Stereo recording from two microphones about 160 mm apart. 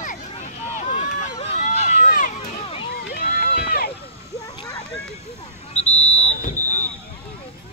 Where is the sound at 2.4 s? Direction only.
35° left (ahead or behind).